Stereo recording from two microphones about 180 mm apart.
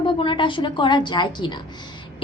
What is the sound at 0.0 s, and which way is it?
A woman's voice, 30° left (ahead or behind).